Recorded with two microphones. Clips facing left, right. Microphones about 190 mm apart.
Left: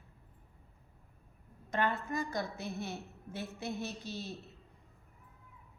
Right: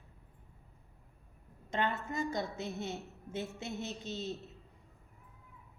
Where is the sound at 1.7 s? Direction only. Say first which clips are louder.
Left 1 dB; 25° right (ahead or behind).